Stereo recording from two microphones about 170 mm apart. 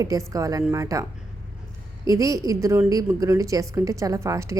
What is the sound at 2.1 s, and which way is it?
A woman's voice, 20° right (ahead or behind).